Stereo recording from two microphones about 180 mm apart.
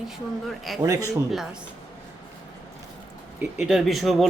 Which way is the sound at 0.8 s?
20° right (ahead or behind).